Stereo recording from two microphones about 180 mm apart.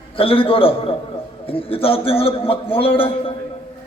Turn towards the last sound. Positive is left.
turn(degrees=30)  # may be behind; listen again after turning